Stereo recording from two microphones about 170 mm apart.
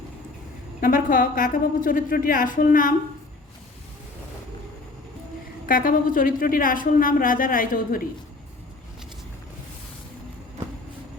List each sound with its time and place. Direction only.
0.8 s speech: 55° left (ahead or behind)
5.6 s speech: 55° left (ahead or behind)